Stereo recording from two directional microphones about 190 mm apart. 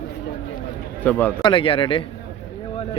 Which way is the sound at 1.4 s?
25° left (ahead or behind).